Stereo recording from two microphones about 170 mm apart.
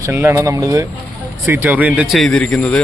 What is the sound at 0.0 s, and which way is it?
Speech, 15° right (ahead or behind).